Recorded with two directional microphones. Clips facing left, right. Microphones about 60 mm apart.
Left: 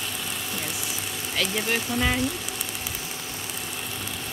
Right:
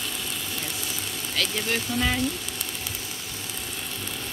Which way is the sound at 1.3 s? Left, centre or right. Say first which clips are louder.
Left 1 dB; centre.